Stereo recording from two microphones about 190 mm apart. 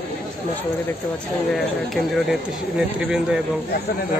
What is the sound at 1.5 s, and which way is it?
Speech, centre (ahead or behind).